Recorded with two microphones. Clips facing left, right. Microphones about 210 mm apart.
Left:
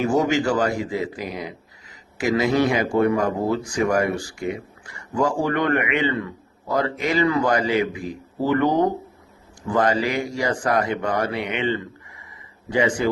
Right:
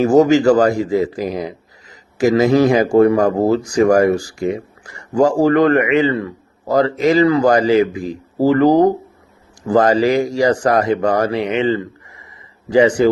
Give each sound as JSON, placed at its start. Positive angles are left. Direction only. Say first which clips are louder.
{"t": 0.0, "sound": "a man's voice", "louder": "right 9 dB", "side_deg": -40}